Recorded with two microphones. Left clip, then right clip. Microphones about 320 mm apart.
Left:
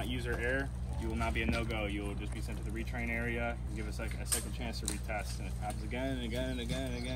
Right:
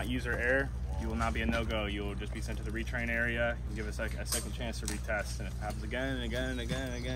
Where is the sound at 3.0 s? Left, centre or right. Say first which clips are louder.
Right 5 dB; right.